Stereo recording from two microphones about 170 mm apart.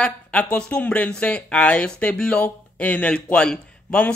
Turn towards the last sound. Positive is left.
turn(degrees=5)  # may be behind; listen again after turning